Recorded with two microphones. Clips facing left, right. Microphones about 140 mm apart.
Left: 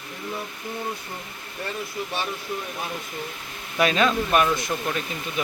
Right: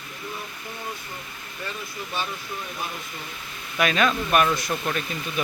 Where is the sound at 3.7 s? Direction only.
30° left (ahead or behind).